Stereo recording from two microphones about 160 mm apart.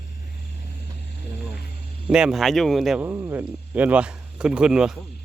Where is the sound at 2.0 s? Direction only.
5° right (ahead or behind).